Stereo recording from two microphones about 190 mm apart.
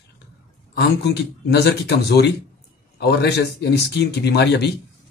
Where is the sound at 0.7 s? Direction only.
60° left (ahead or behind).